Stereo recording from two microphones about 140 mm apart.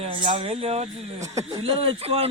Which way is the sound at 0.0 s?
35° right (ahead or behind).